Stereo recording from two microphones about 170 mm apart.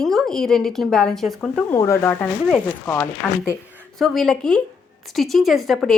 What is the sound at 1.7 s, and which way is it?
Speech, 15° left (ahead or behind).